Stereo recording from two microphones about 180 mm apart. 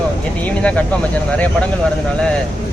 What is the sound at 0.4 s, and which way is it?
Speech, 5° left (ahead or behind).